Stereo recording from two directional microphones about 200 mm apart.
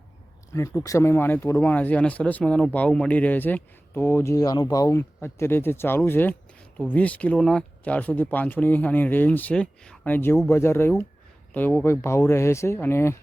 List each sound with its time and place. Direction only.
0.5 s speech: 15° left (ahead or behind)